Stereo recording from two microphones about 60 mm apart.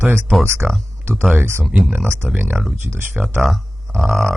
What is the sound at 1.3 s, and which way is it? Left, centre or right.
Speech, right.